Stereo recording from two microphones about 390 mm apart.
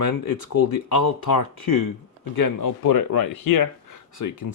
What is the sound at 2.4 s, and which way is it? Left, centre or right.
Speech, left.